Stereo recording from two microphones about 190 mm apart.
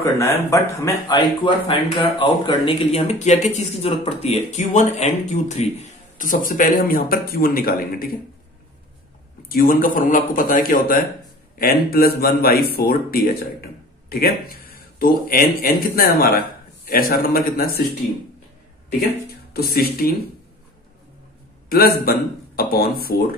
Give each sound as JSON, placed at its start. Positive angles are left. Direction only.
{"t": 0.0, "sound": "speech", "side_deg": 15}
{"t": 9.5, "sound": "speech", "side_deg": 50}
{"t": 18.9, "sound": "speech", "side_deg": 55}
{"t": 21.6, "sound": "a man's voice", "side_deg": 50}